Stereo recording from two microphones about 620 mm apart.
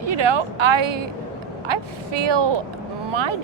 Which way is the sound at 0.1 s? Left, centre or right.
Right.